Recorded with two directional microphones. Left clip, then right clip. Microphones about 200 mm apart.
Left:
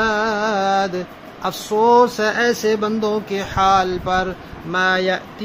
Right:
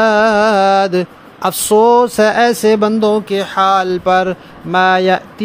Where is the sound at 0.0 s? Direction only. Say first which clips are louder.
Right 8 dB; 50° right (ahead or behind).